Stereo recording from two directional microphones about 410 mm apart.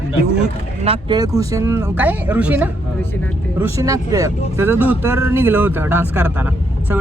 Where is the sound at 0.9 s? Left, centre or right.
Centre.